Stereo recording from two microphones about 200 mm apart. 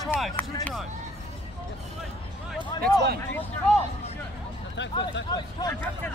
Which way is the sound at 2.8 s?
50° right (ahead or behind).